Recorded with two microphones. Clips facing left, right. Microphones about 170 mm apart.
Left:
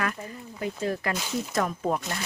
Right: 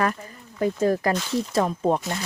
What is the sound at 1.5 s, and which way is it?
Speech, 30° right (ahead or behind).